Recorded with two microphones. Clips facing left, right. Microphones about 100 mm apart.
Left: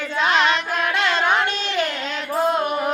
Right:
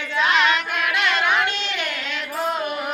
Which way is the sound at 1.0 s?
30° left (ahead or behind).